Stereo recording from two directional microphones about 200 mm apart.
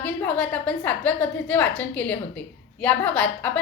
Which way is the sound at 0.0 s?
5° left (ahead or behind).